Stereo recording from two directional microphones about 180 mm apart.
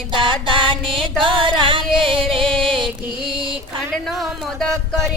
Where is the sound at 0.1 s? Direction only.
25° right (ahead or behind).